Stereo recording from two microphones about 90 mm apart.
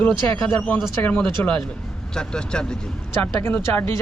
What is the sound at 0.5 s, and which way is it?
Speech, 15° left (ahead or behind).